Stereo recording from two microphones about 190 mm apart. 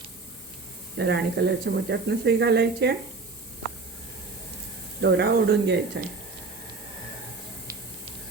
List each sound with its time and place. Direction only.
0.9 s speech: 65° right (ahead or behind)
4.9 s speech: 65° right (ahead or behind)